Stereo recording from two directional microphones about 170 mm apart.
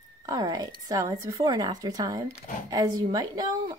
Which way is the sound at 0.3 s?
20° right (ahead or behind).